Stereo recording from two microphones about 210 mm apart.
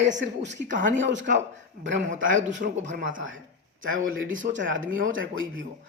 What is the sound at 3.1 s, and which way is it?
Speech, 70° right (ahead or behind).